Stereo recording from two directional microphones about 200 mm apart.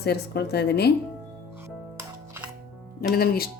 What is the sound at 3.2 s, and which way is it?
Speech, 50° left (ahead or behind).